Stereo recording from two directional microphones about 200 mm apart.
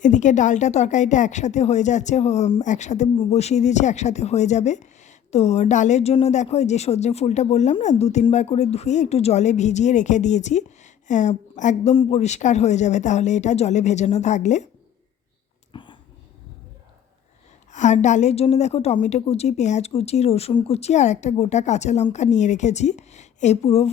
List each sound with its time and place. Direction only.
0.0 s speech: 40° left (ahead or behind)
15.7 s a sound: 25° left (ahead or behind)
17.7 s speech: 35° left (ahead or behind)